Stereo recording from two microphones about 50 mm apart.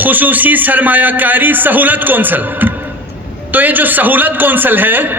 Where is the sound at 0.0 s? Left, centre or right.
Right.